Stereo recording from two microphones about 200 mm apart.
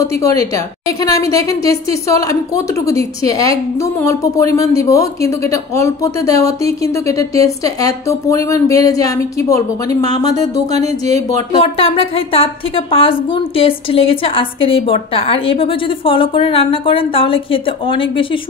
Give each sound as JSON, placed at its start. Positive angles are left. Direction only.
{"t": 0.0, "sound": "a woman's voice", "side_deg": 15}
{"t": 10.8, "sound": "speech", "side_deg": -35}
{"t": 11.6, "sound": "speech", "side_deg": 30}